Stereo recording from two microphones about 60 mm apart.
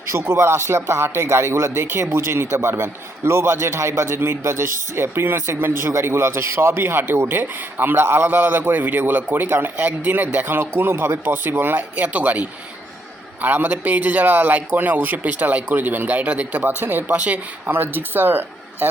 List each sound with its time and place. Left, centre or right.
0.1 s a man's voice: right
1.8 s a man's voice: right